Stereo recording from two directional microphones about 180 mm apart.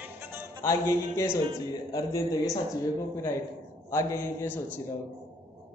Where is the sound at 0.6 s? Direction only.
15° left (ahead or behind).